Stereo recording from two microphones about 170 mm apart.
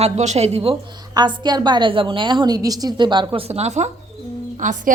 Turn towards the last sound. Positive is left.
turn(degrees=-50)  # may be behind; listen again after turning